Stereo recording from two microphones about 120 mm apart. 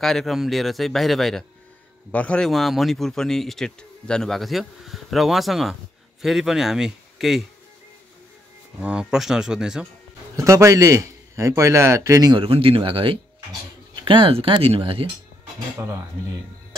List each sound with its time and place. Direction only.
0.0 s speech: centre (ahead or behind)
8.8 s speech: 5° right (ahead or behind)
10.3 s a man's voice: 25° right (ahead or behind)
12.4 s speech: 50° right (ahead or behind)